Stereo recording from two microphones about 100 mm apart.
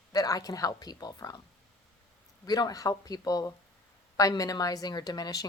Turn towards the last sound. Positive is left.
turn(degrees=40)  # may be behind; listen again after turning